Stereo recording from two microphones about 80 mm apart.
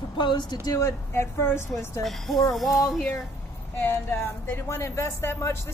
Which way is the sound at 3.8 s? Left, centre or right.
Left.